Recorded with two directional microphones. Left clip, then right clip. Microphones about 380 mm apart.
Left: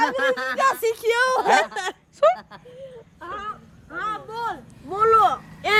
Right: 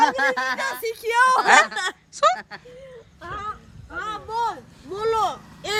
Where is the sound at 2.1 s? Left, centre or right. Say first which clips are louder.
Left 1 dB; centre.